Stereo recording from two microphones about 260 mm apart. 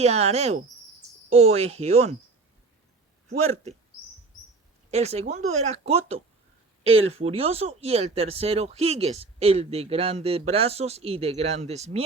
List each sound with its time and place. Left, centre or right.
0.0 s speech: right
3.2 s speech: right
4.9 s speech: right